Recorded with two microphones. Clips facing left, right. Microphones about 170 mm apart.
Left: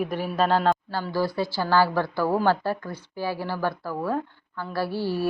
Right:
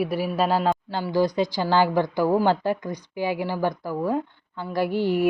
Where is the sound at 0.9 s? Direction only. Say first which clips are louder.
Right 4 dB; 20° right (ahead or behind).